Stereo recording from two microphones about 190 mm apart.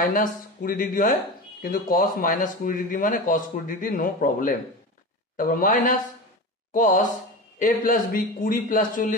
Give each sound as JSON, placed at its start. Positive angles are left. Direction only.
{"t": 0.0, "sound": "speech", "side_deg": 45}